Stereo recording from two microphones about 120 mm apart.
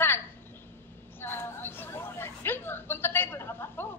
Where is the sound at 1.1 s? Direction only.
20° left (ahead or behind).